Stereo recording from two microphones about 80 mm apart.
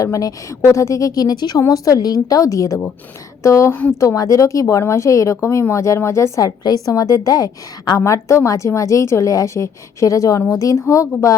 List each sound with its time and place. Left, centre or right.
0.0 s a woman's voice: left
1.6 s a woman's voice: left
3.7 s speech: left
4.0 s a woman's voice: left